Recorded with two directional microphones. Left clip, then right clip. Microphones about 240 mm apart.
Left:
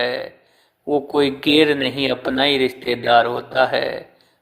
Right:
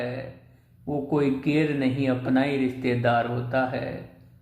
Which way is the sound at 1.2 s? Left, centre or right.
Left.